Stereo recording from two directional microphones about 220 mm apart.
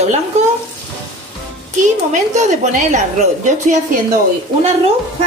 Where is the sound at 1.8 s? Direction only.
35° right (ahead or behind).